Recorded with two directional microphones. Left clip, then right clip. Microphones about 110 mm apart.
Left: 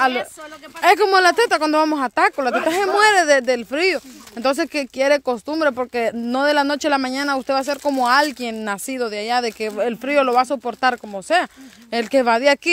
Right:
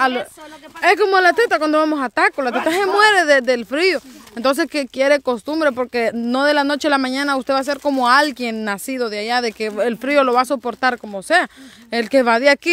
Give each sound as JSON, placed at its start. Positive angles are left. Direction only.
{"t": 0.0, "sound": "speech", "side_deg": -20}
{"t": 10.8, "sound": "speech", "side_deg": -20}